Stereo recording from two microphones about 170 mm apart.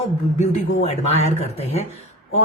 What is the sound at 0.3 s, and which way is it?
Speech, 40° left (ahead or behind).